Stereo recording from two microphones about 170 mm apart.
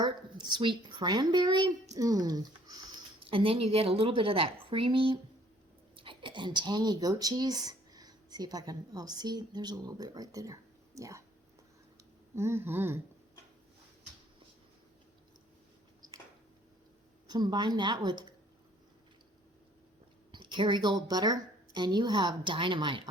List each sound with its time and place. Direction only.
0.0 s a woman's voice: 25° right (ahead or behind)
12.4 s speech: 15° right (ahead or behind)
17.2 s a woman's voice: 25° right (ahead or behind)
20.3 s a woman's voice: 30° right (ahead or behind)